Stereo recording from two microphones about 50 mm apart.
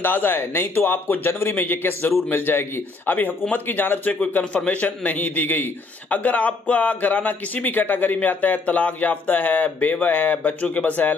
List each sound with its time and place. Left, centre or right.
0.0 s a man's voice: left
4.6 s a man's voice: left